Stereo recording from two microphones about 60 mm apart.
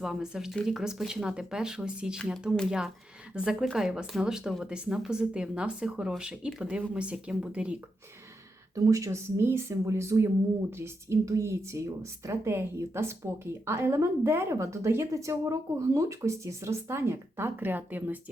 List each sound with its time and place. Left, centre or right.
0.0 s speech: centre
8.7 s a woman's voice: right